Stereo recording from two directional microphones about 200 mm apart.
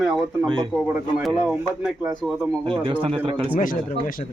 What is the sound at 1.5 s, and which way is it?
Speech, 5° right (ahead or behind).